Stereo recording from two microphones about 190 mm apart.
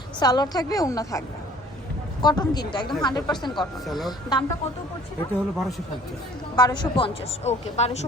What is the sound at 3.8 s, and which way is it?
Speech, centre (ahead or behind).